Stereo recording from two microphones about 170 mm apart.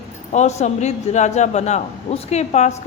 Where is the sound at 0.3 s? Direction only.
40° left (ahead or behind).